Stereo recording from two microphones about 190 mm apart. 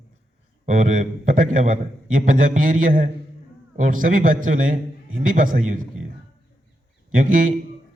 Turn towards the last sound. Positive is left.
turn(degrees=-45)  # may be behind; listen again after turning